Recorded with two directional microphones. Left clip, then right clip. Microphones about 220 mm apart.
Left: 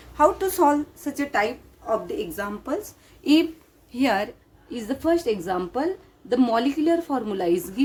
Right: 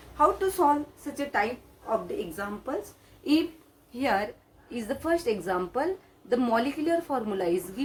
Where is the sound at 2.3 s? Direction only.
50° left (ahead or behind).